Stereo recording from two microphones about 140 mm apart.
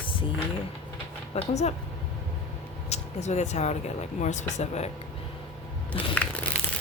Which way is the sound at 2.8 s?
50° left (ahead or behind).